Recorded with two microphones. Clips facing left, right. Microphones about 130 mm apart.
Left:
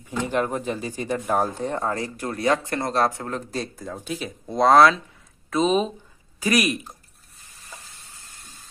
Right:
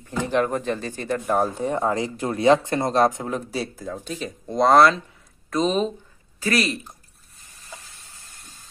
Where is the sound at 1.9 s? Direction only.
20° right (ahead or behind); by 5.9 s 5° left (ahead or behind).